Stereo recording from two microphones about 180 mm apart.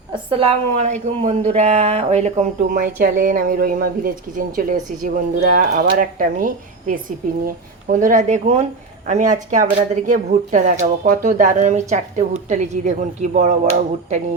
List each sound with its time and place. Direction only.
0.1 s a woman's voice: 30° right (ahead or behind)
2.7 s a woman's voice: 55° right (ahead or behind)